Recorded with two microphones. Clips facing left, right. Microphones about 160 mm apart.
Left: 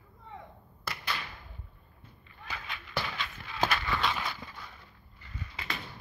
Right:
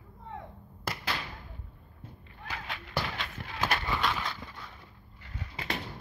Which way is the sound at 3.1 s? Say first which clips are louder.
Right 1 dB; 55° right (ahead or behind).